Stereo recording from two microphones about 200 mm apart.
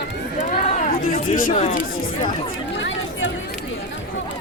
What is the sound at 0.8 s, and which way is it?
Speech, 40° left (ahead or behind).